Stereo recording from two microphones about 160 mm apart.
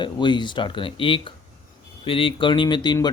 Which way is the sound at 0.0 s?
30° left (ahead or behind).